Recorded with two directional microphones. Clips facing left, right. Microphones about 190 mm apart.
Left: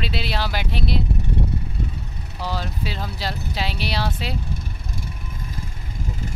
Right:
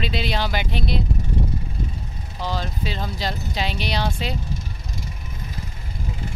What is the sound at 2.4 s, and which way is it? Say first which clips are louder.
Speech: right 1 dB; 5° left (ahead or behind).